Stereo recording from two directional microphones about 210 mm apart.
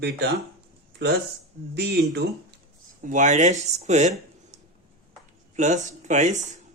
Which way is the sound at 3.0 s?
40° right (ahead or behind).